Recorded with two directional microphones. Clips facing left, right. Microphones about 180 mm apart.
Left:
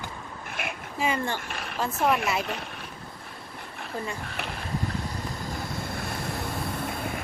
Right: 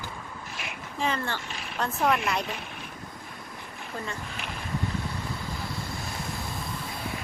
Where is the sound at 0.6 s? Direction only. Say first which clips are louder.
Left 7 dB; 55° left (ahead or behind).